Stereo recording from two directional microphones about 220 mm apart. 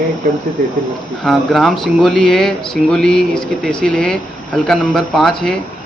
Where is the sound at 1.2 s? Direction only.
Centre (ahead or behind).